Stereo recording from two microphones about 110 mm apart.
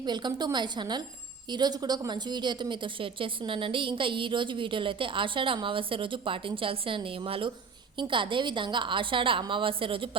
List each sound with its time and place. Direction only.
0.0 s a woman's voice: 40° right (ahead or behind)